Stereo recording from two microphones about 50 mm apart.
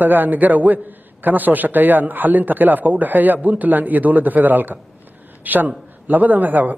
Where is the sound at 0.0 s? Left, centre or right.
Right.